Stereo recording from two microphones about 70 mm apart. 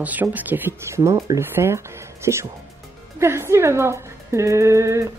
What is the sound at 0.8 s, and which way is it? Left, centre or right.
Speech, right.